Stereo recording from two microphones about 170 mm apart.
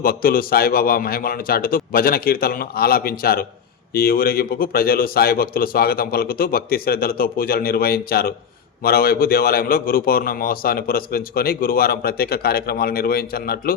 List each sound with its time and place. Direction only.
0.0 s a man's voice: 60° left (ahead or behind)